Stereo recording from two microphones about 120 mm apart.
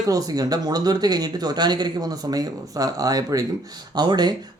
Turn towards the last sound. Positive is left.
turn(degrees=-35)  # may be behind; listen again after turning